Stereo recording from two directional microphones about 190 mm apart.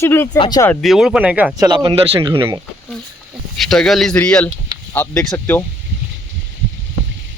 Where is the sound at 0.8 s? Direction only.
Centre (ahead or behind).